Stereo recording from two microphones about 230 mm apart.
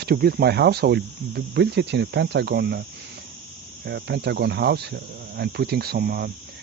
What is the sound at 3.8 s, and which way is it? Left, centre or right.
Speech, right.